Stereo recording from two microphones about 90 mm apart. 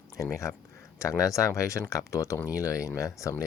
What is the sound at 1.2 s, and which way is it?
Speech, 40° left (ahead or behind).